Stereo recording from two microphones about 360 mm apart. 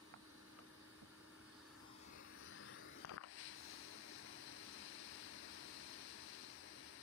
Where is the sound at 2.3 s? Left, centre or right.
Left.